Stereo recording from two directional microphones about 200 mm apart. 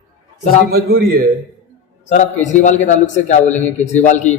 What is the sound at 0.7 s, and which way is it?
Speech, 50° right (ahead or behind).